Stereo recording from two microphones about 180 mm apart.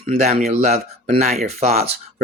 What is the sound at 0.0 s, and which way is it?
Speech, 35° right (ahead or behind).